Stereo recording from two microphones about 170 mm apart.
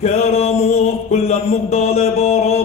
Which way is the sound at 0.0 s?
40° left (ahead or behind).